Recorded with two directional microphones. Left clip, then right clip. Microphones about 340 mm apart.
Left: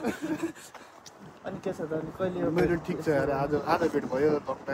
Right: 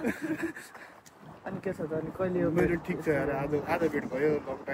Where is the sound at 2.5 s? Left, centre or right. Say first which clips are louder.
Left 1 dB; centre.